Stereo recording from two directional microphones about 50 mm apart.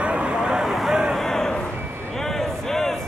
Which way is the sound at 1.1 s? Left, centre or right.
Centre.